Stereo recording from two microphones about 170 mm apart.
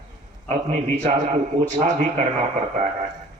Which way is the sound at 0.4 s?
45° right (ahead or behind).